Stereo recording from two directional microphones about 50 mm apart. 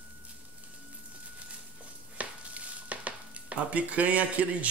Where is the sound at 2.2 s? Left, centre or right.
Right.